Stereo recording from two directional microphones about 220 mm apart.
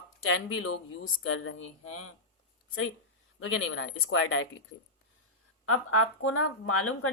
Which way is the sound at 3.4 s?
60° left (ahead or behind).